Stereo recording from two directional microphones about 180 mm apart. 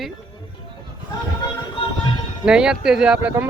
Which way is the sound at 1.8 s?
30° left (ahead or behind).